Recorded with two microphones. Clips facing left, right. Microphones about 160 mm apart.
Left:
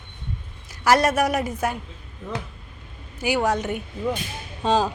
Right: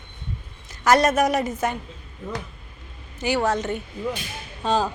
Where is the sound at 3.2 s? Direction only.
10° left (ahead or behind).